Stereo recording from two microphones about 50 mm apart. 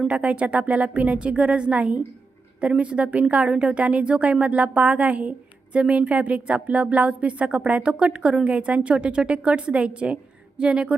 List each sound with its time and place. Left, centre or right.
0.1 s a woman's voice: right